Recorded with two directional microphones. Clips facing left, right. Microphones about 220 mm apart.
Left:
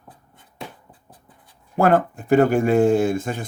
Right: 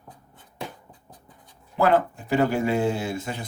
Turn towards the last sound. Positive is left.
turn(degrees=50)  # may be behind; listen again after turning